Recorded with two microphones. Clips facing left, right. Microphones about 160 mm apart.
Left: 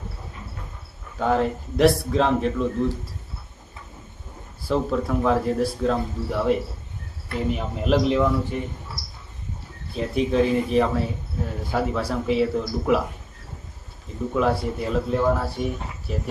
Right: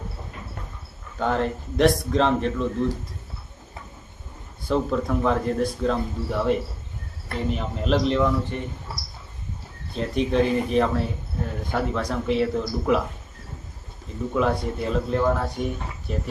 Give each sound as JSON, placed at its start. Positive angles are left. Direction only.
{"t": 1.2, "sound": "speech", "side_deg": 5}
{"t": 4.7, "sound": "a man's voice", "side_deg": 0}
{"t": 9.9, "sound": "speech", "side_deg": 5}
{"t": 14.3, "sound": "speech", "side_deg": 5}